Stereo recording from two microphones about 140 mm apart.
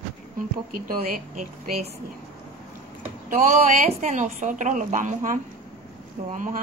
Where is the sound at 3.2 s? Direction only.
65° right (ahead or behind).